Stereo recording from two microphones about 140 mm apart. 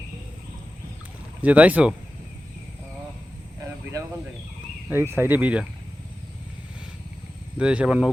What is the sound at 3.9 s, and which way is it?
Speech, 25° right (ahead or behind).